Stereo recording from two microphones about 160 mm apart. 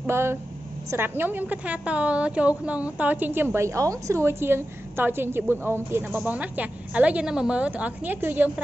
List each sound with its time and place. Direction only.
0.0 s a woman's voice: 15° right (ahead or behind)